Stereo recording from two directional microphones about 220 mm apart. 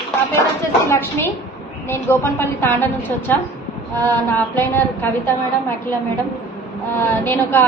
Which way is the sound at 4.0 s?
10° left (ahead or behind).